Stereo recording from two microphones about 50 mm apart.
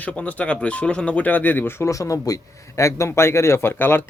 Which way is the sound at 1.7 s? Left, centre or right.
Left.